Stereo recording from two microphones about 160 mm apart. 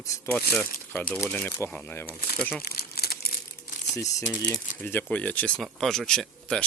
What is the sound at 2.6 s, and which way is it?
Crumpling, 80° left.